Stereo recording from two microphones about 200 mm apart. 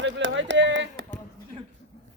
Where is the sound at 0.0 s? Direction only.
65° right (ahead or behind).